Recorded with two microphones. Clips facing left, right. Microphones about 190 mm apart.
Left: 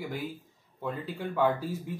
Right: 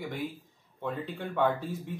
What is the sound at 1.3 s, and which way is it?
Speech, 5° left (ahead or behind).